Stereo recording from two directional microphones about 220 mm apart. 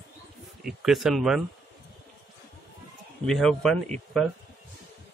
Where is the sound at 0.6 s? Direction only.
Centre (ahead or behind).